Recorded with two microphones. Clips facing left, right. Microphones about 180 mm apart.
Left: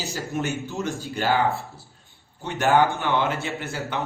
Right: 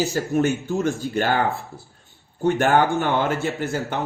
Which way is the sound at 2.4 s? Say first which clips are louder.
Right 2 dB; 50° right (ahead or behind).